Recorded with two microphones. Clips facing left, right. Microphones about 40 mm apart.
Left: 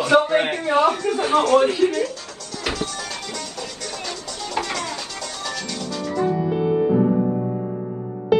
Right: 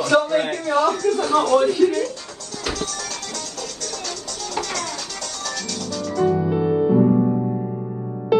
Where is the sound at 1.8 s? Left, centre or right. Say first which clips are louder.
Right 2 dB; left.